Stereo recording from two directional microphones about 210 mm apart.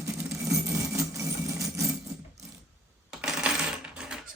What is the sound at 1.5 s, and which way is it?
Vehicle, 15° right (ahead or behind).